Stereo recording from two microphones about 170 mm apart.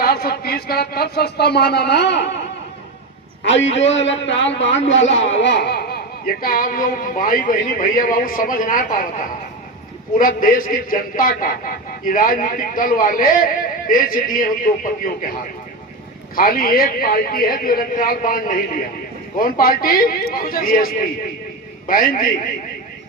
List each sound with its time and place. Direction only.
0.0 s speech: 65° left (ahead or behind); by 2.3 s 90° left
3.6 s a man's voice: 40° left (ahead or behind)
3.8 s a man's voice: 90° left; by 9.0 s 55° left (ahead or behind)
10.2 s speech: 55° left (ahead or behind)
16.3 s speech: 60° left (ahead or behind)